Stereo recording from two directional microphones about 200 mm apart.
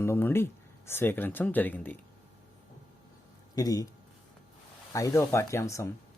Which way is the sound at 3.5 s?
20° left (ahead or behind).